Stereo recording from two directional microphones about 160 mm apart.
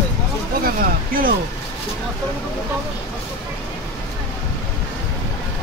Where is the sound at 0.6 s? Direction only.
65° right (ahead or behind).